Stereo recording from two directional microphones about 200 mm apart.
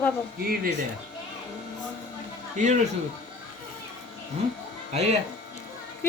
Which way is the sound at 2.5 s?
35° right (ahead or behind).